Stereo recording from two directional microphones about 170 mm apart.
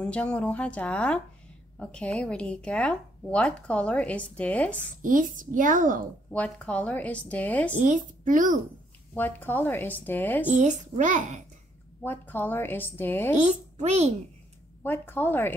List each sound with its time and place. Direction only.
0.0 s speech: 5° left (ahead or behind)
5.0 s speech: 50° right (ahead or behind)
6.3 s speech: 5° left (ahead or behind)
7.8 s speech: 50° right (ahead or behind)
9.1 s speech: 10° left (ahead or behind)
10.5 s speech: 45° right (ahead or behind)
12.0 s speech: 10° left (ahead or behind)
13.5 s a child's voice: 40° right (ahead or behind)
14.8 s speech: 10° left (ahead or behind)